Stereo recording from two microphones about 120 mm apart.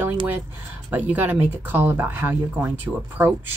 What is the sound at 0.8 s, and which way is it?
Speech, 15° right (ahead or behind).